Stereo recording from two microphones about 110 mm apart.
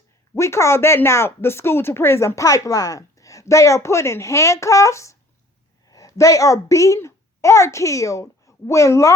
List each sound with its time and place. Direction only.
0.3 s a woman's voice: 25° left (ahead or behind)